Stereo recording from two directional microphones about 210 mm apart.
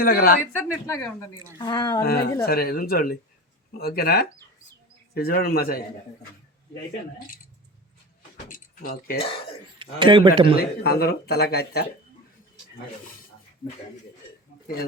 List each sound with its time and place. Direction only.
0.0 s speech: 45° left (ahead or behind)
0.5 s speech: 15° left (ahead or behind)
2.0 s speech: 45° left (ahead or behind)
8.4 s a sound: 40° left (ahead or behind)
9.7 s speech: 25° right (ahead or behind)
10.6 s speech: 50° left (ahead or behind)